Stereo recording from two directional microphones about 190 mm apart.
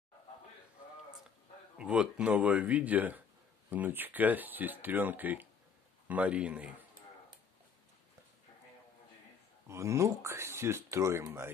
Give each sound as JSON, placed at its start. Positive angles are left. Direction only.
{"t": 1.8, "sound": "speech", "side_deg": -5}
{"t": 9.7, "sound": "speech", "side_deg": -15}